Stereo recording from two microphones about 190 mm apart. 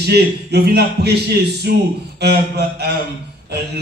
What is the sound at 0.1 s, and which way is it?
A man's voice, 60° right (ahead or behind).